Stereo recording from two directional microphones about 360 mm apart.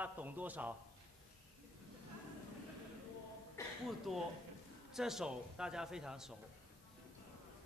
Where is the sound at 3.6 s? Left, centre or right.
Centre.